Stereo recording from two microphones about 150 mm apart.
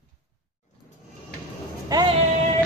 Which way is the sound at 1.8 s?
25° right (ahead or behind).